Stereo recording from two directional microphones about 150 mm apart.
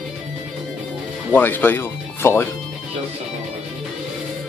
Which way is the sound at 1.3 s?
15° left (ahead or behind).